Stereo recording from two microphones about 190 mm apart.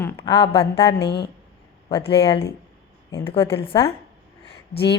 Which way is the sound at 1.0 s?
60° left (ahead or behind).